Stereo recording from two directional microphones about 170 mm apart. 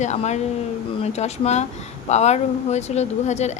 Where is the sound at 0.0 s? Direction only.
40° left (ahead or behind).